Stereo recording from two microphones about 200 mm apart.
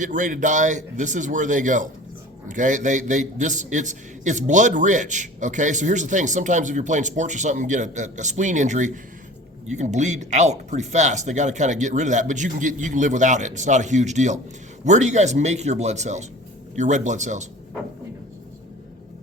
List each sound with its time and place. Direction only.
0.0 s a man's voice: 40° right (ahead or behind)